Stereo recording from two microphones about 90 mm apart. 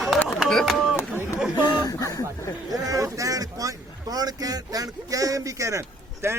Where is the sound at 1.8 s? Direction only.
40° left (ahead or behind).